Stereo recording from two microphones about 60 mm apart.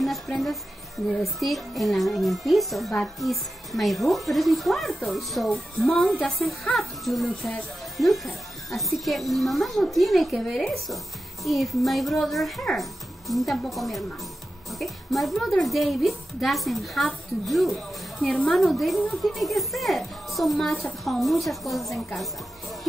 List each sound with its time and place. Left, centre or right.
1.2 s a woman's voice: centre
5.5 s speech: left
6.1 s a woman's voice: centre
17.7 s speech: left
18.5 s a woman's voice: centre